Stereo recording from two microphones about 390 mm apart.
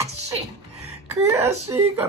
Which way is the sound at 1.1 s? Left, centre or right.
Centre.